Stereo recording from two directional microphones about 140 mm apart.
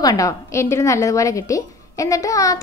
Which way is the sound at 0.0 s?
25° left (ahead or behind).